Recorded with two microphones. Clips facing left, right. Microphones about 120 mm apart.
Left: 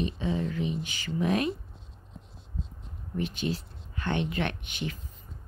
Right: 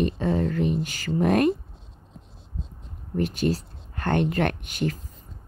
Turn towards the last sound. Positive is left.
turn(degrees=-45)  # may be behind; listen again after turning